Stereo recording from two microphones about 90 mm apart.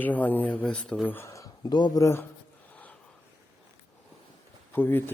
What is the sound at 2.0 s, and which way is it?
Speech, 30° left (ahead or behind).